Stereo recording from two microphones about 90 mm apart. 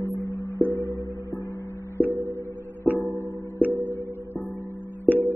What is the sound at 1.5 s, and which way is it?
Music, 35° left (ahead or behind).